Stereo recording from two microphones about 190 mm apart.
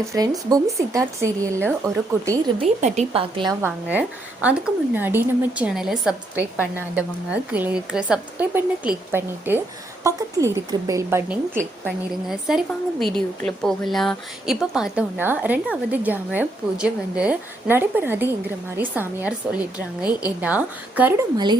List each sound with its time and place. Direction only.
0.0 s speech: 15° right (ahead or behind)
2.6 s speech: 35° right (ahead or behind); by 21.2 s 10° right (ahead or behind)
21.3 s speech: 20° right (ahead or behind)